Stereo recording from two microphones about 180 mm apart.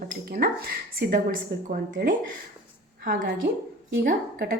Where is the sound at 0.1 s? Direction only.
60° right (ahead or behind).